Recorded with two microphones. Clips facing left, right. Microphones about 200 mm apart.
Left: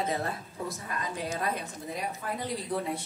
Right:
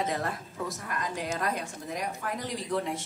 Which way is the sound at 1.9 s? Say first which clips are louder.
Right 1 dB; 90° right.